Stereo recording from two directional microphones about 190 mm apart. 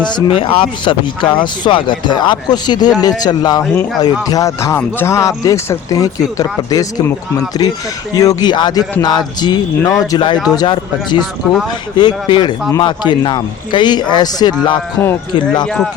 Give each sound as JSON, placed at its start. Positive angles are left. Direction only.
{"t": 0.3, "sound": "a man's voice", "side_deg": 30}
{"t": 15.6, "sound": "speech", "side_deg": 5}